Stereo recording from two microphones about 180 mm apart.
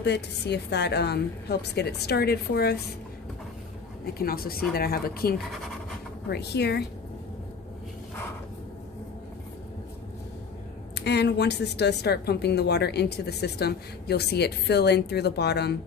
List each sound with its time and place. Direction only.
0.0 s a woman's voice: 70° left (ahead or behind)
4.0 s a woman's voice: 55° left (ahead or behind)
6.3 s a woman's voice: 65° left (ahead or behind)
10.9 s a woman's voice: 70° left (ahead or behind)